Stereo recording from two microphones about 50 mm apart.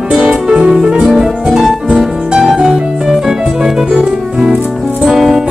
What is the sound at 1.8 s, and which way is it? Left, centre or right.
Music, centre.